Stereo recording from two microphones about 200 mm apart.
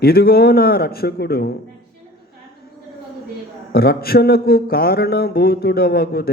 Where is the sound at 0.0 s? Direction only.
50° left (ahead or behind).